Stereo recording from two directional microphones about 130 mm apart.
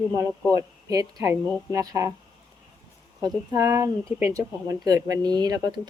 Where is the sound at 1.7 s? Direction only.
25° right (ahead or behind).